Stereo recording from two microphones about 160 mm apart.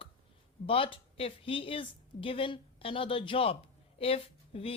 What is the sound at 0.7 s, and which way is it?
Speech, 35° left (ahead or behind).